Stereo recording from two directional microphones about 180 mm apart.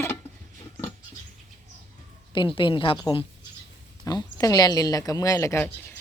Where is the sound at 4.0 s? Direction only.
20° left (ahead or behind).